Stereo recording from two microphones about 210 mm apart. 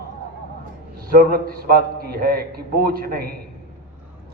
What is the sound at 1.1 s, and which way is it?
A man's voice, 45° right (ahead or behind).